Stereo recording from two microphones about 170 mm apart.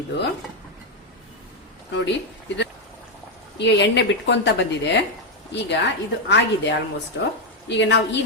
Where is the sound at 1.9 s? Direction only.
90° left.